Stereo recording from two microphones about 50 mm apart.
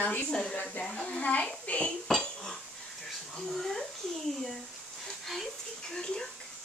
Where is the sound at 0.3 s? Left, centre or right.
Centre.